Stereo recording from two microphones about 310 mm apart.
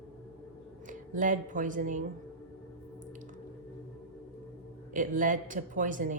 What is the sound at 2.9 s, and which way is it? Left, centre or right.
Squish, right.